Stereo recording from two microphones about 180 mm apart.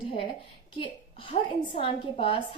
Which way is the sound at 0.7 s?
30° left (ahead or behind).